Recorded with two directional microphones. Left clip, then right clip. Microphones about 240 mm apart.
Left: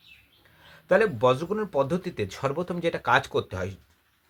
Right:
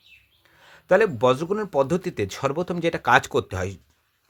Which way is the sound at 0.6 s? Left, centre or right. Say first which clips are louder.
Right 3 dB; right.